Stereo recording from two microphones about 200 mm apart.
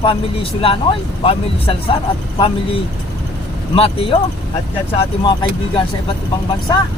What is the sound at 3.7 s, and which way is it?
Speech, 30° left (ahead or behind).